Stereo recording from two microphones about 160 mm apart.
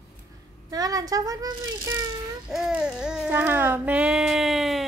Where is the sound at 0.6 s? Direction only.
25° right (ahead or behind).